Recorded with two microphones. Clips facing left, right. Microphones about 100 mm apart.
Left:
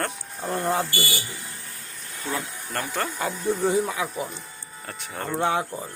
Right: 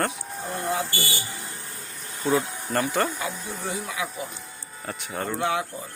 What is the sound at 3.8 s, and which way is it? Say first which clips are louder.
Speech: left 3 dB; 40° left (ahead or behind).